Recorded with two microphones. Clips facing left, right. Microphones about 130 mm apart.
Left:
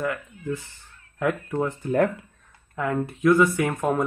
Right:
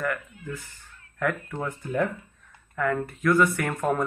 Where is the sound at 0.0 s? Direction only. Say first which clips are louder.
Left 2 dB; 20° left (ahead or behind).